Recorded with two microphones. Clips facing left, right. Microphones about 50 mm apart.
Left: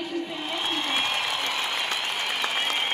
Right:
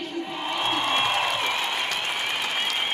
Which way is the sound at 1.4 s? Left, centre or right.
Centre.